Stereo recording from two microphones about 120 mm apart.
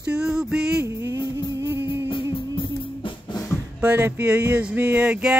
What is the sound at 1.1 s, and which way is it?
Music, 25° right (ahead or behind).